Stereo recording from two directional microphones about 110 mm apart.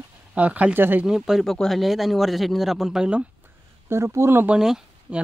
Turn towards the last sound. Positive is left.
turn(degrees=-5)  # may be behind; listen again after turning